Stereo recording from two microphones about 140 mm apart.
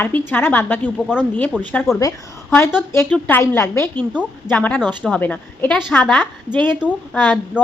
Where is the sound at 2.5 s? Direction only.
15° left (ahead or behind).